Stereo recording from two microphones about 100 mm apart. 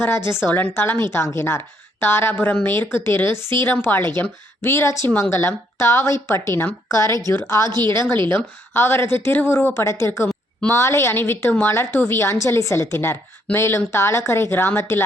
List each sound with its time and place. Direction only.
0.0 s a woman's voice: 25° left (ahead or behind)
8.7 s a woman's voice: 20° left (ahead or behind)